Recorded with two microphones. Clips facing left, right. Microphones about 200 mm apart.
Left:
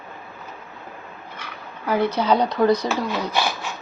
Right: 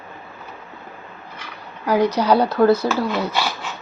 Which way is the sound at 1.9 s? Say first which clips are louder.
Right 3 dB; 15° right (ahead or behind).